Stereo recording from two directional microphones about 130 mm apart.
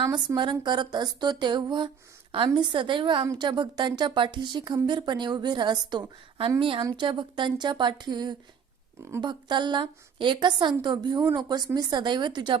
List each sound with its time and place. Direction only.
0.0 s speech: 35° right (ahead or behind)